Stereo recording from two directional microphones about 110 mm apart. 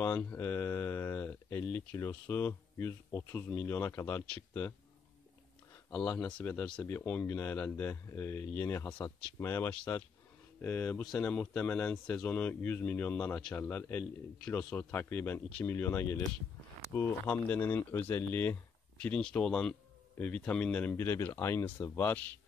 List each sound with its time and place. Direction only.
0.0 s speech: 15° left (ahead or behind)
5.9 s speech: 10° left (ahead or behind)
6.8 s speech: 20° left (ahead or behind)
9.9 s speech: 25° left (ahead or behind)